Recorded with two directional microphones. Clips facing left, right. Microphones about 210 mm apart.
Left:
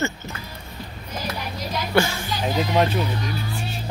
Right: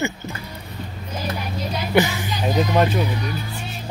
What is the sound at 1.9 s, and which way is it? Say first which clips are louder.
Speech: right 2 dB; 15° right (ahead or behind).